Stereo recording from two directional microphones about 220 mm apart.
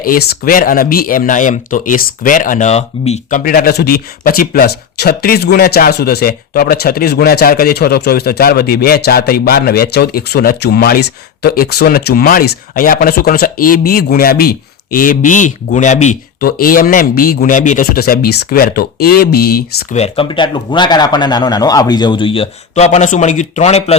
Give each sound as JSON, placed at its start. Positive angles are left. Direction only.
{"t": 0.0, "sound": "speech", "side_deg": 45}
{"t": 20.0, "sound": "a man's voice", "side_deg": 25}